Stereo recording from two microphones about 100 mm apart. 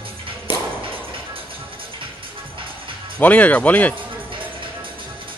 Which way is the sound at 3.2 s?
15° left (ahead or behind).